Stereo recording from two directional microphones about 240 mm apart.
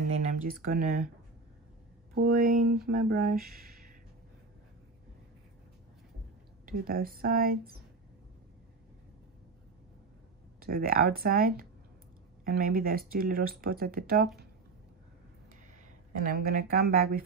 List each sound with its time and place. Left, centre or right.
0.2 s speech: right
2.1 s speech: right
6.6 s speech: right
10.6 s speech: right
16.2 s speech: right